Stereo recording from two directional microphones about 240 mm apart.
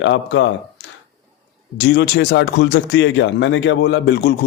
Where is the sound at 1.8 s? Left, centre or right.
Left.